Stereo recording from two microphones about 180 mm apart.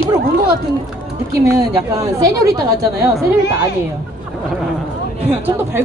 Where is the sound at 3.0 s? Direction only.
20° right (ahead or behind).